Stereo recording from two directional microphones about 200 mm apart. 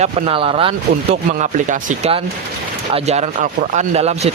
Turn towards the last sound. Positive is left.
turn(degrees=-30)  # may be behind; listen again after turning